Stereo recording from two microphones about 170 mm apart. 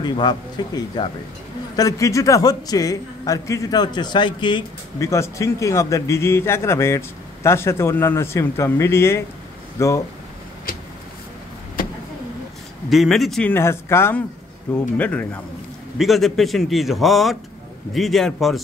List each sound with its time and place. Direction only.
0.0 s a man's voice: 25° left (ahead or behind)
12.9 s a man's voice: centre (ahead or behind)